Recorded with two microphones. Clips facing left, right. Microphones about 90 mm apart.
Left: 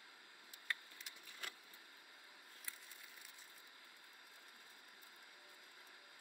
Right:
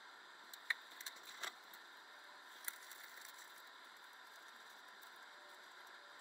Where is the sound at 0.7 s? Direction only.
25° right (ahead or behind).